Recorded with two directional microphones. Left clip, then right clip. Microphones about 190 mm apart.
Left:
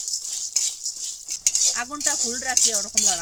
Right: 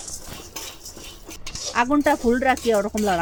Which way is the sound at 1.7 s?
15° right (ahead or behind).